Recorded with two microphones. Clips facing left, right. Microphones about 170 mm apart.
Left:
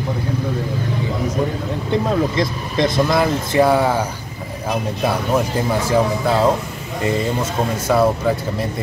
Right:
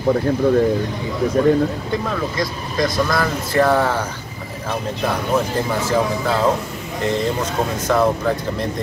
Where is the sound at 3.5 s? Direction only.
10° left (ahead or behind).